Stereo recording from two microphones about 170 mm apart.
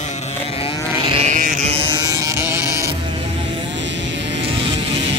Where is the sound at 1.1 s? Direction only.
45° right (ahead or behind).